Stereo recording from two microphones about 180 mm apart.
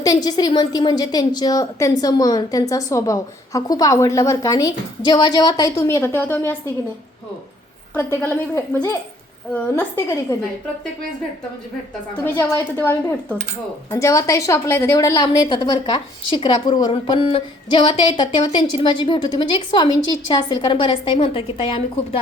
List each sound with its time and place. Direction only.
0.0 s a woman's voice: 20° left (ahead or behind)
7.9 s speech: 15° left (ahead or behind)
12.2 s a woman's voice: 10° left (ahead or behind); by 22.2 s 30° left (ahead or behind)